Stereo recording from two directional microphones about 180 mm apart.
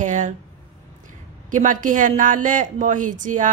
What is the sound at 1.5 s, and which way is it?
A woman's voice, 45° right (ahead or behind).